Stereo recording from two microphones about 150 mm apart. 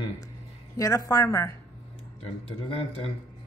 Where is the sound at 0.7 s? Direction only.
20° left (ahead or behind).